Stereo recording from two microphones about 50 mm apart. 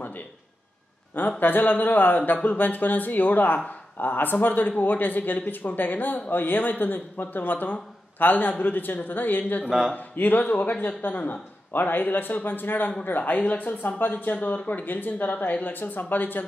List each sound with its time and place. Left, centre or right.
1.4 s speech: left
9.7 s speech: centre
9.9 s speech: left